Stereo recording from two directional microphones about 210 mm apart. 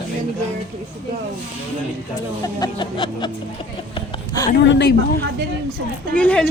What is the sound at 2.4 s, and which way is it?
Speech, 20° left (ahead or behind).